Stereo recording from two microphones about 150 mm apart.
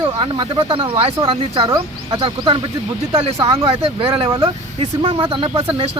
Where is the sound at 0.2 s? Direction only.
30° right (ahead or behind).